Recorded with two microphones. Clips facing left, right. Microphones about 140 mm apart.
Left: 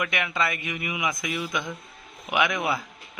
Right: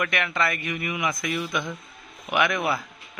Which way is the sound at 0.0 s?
15° left (ahead or behind).